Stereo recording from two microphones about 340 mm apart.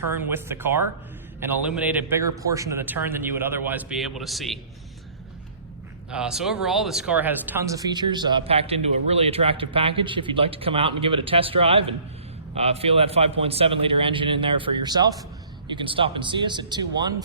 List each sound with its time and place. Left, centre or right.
0.1 s a man's voice: centre
6.1 s speech: centre